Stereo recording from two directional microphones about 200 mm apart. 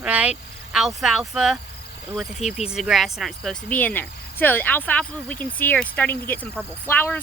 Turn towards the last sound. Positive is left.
turn(degrees=10)  # may be behind; listen again after turning